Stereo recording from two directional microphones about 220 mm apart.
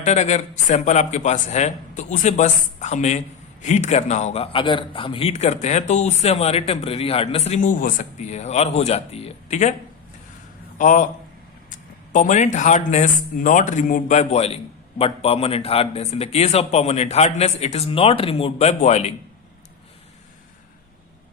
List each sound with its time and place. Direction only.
0.0 s speech: 30° left (ahead or behind)
10.8 s a man's voice: 35° left (ahead or behind)
12.1 s speech: 35° left (ahead or behind)